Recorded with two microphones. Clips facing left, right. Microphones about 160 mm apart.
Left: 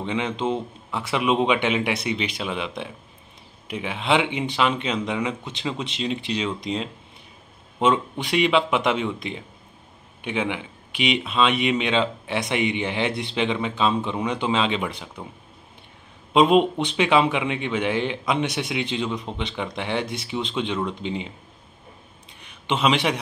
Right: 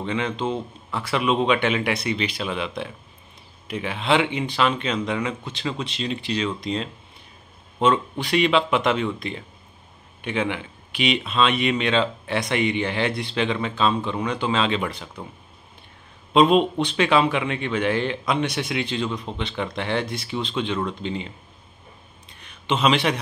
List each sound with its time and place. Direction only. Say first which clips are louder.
0.0 s speech: even; 20° left (ahead or behind)
16.3 s speech: even; 15° left (ahead or behind)
22.4 s a sound: right 1 dB; 15° left (ahead or behind)